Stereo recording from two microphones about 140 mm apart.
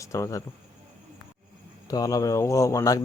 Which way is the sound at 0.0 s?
20° left (ahead or behind).